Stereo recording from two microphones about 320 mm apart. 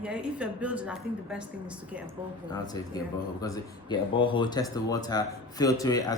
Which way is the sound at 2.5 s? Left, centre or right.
Centre.